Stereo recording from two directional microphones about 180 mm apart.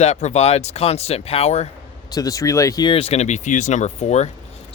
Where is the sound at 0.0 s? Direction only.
40° left (ahead or behind).